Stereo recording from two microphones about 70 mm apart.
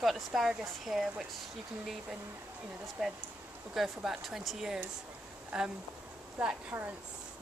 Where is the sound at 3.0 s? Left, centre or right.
Centre.